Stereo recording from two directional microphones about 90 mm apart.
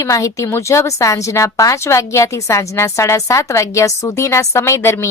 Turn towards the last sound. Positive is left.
turn(degrees=30)  # may be behind; listen again after turning